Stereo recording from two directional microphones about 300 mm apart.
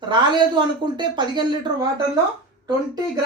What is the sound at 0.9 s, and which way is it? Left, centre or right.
Speech, centre.